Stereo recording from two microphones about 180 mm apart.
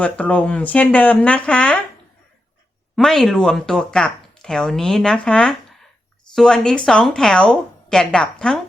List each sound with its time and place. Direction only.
0.0 s speech: 5° left (ahead or behind)
2.9 s speech: centre (ahead or behind)